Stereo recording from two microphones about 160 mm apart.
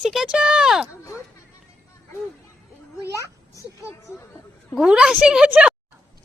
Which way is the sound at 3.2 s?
15° left (ahead or behind).